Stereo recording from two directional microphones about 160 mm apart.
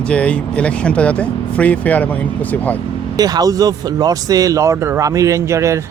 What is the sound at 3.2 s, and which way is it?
Speech, 25° right (ahead or behind).